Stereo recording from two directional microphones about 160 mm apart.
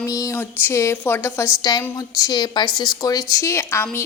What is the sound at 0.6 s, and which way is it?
A woman's voice, 20° left (ahead or behind).